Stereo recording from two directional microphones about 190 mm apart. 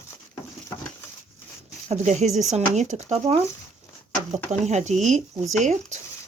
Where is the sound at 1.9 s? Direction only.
35° right (ahead or behind).